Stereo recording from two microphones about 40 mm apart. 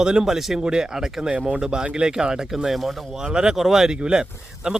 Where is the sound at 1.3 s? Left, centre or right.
Right.